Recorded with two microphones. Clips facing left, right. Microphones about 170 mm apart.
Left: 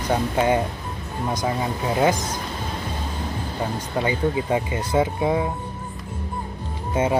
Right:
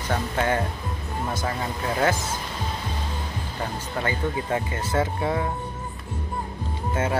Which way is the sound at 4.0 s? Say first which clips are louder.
Left 5 dB; 15° left (ahead or behind).